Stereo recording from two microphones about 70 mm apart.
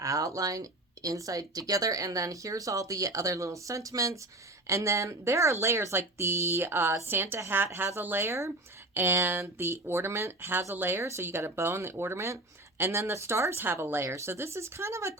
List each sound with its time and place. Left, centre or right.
0.0 s speech: right
9.0 s speech: right